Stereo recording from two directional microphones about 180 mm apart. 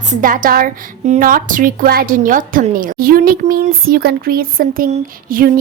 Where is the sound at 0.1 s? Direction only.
50° right (ahead or behind).